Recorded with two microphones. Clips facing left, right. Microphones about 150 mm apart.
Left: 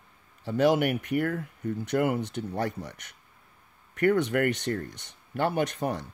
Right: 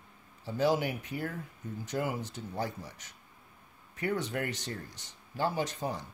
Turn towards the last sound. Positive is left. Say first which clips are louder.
# left 6 dB
turn(degrees=65)  # may be behind; listen again after turning